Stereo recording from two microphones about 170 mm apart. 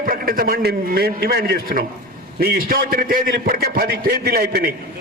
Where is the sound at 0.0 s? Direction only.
60° right (ahead or behind).